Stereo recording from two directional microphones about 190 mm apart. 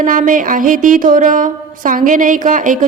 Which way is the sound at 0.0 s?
45° right (ahead or behind).